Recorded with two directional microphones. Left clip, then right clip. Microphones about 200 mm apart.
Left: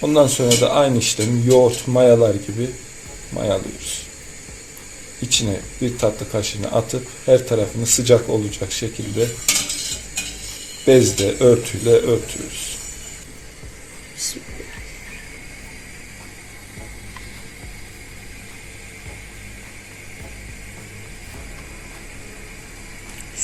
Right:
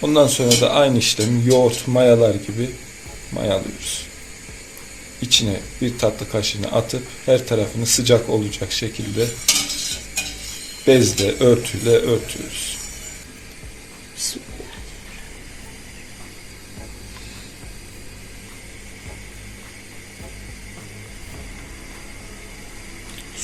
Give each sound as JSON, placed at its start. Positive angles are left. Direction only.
{"t": 0.0, "sound": "speech", "side_deg": 0}
{"t": 5.2, "sound": "speech", "side_deg": 0}
{"t": 9.7, "sound": "stir", "side_deg": 0}
{"t": 10.8, "sound": "speech", "side_deg": 0}